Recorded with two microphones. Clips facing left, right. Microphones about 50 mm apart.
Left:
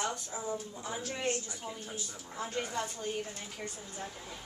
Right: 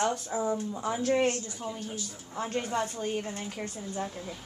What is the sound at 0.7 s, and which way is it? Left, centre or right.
Speech, right.